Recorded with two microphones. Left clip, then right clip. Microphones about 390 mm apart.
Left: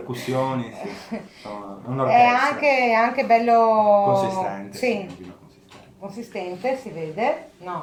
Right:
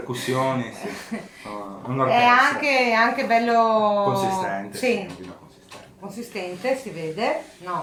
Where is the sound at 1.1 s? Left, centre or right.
Centre.